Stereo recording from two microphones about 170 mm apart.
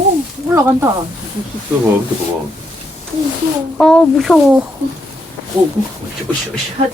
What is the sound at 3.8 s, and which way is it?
Speech, 5° left (ahead or behind).